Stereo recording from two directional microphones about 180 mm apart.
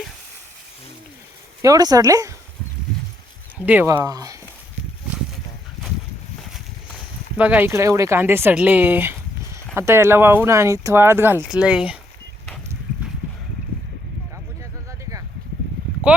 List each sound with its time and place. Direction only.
1.6 s speech: 20° right (ahead or behind)
3.7 s speech: 10° right (ahead or behind)
7.3 s speech: 10° right (ahead or behind)